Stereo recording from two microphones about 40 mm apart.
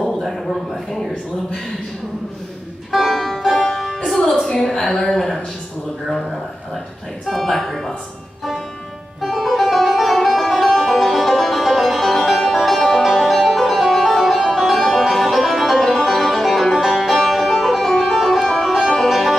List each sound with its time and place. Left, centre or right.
0.0 s a sound: centre
2.9 s music: centre
3.5 s music: centre
4.1 s a sound: centre
6.0 s speech: centre
9.2 s music: centre